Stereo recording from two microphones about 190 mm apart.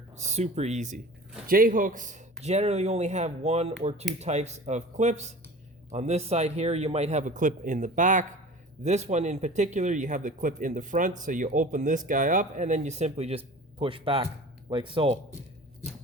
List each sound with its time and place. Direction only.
0.2 s speech: 35° right (ahead or behind)
1.5 s speech: 50° right (ahead or behind); by 15.2 s 30° right (ahead or behind)